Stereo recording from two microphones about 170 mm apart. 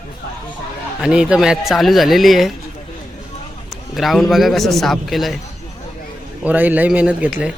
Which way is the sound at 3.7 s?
Centre (ahead or behind).